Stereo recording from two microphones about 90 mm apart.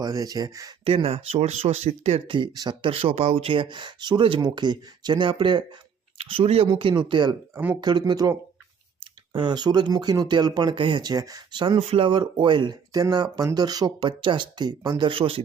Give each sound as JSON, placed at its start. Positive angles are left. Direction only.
{"t": 0.0, "sound": "speech", "side_deg": -45}
{"t": 0.9, "sound": "speech", "side_deg": -90}
{"t": 2.1, "sound": "speech", "side_deg": -70}
{"t": 6.2, "sound": "speech", "side_deg": -85}
{"t": 9.3, "sound": "speech", "side_deg": -60}
{"t": 10.8, "sound": "speech", "side_deg": -60}
{"t": 11.5, "sound": "speech", "side_deg": -60}
{"t": 12.9, "sound": "speech", "side_deg": -50}